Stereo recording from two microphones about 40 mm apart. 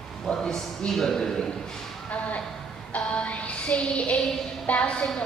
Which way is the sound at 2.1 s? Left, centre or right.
Left.